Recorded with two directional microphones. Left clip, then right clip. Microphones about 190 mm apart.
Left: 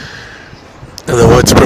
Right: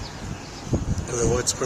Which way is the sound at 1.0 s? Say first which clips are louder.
Left 18 dB; 45° left (ahead or behind).